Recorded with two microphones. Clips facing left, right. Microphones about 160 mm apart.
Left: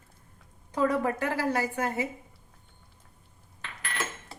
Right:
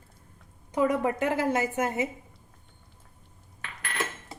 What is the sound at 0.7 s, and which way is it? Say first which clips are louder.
A woman's voice: right 1 dB; 20° right (ahead or behind).